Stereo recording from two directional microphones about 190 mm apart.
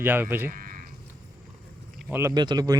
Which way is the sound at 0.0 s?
10° right (ahead or behind).